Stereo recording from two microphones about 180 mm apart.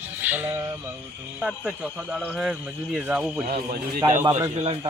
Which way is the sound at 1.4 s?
5° right (ahead or behind).